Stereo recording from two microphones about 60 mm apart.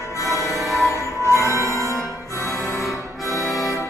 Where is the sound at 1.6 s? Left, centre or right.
Left.